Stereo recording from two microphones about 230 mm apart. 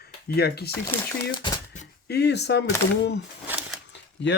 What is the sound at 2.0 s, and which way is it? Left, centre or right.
Speech, left.